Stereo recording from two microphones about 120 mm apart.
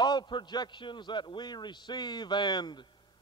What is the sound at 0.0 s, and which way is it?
A man's voice, 40° left (ahead or behind).